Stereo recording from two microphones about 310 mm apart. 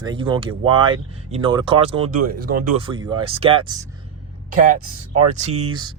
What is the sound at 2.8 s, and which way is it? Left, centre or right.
Speech, centre.